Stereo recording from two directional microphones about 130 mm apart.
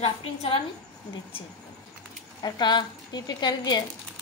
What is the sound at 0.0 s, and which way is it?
Speech, 50° left (ahead or behind).